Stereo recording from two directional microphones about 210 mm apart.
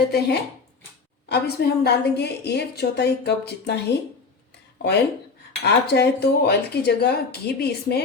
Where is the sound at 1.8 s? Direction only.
50° left (ahead or behind).